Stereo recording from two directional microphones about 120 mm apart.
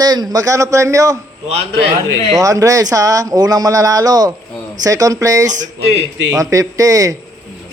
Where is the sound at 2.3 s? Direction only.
30° right (ahead or behind).